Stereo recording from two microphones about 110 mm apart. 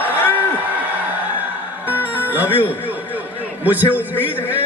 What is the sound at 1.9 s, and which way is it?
Music, 20° left (ahead or behind).